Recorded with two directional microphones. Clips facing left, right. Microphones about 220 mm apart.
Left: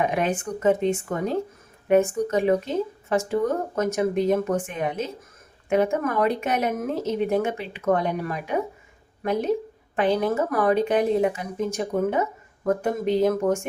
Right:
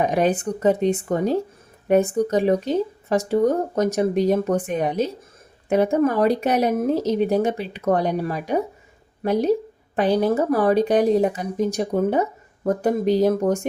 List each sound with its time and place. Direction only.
0.0 s speech: 35° right (ahead or behind)